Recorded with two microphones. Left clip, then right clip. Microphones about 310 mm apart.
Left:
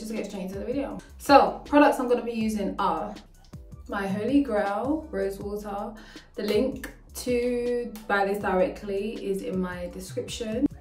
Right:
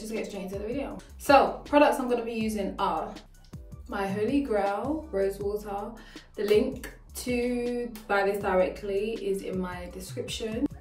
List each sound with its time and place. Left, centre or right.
0.1 s a woman's voice: centre